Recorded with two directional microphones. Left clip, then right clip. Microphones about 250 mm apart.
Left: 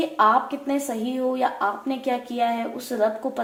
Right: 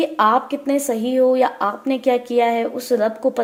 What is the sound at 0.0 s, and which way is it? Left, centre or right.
A woman's voice, right.